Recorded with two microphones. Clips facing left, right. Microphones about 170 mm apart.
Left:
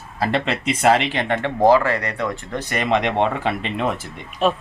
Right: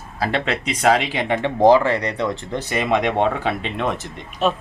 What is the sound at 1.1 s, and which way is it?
Speech, 15° right (ahead or behind).